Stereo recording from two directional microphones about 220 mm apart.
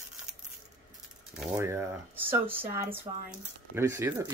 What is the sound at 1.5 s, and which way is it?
Speech, 10° right (ahead or behind).